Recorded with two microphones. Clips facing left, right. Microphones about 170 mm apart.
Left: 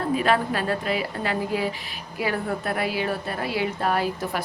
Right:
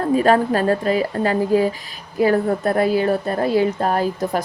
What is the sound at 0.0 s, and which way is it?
A woman's voice, 40° right (ahead or behind).